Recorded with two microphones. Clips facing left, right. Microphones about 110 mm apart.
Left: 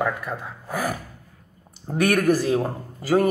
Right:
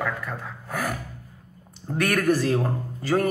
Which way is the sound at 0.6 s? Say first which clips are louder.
Left 2 dB; 5° left (ahead or behind).